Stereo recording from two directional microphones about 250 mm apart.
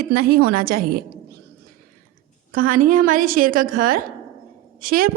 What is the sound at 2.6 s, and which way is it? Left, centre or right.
A woman's voice, right.